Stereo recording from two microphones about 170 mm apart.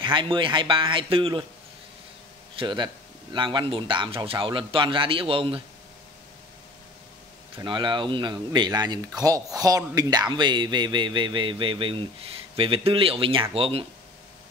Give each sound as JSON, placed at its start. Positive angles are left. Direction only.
{"t": 0.0, "sound": "a man's voice", "side_deg": -30}
{"t": 2.5, "sound": "a man's voice", "side_deg": -30}
{"t": 7.6, "sound": "a man's voice", "side_deg": -25}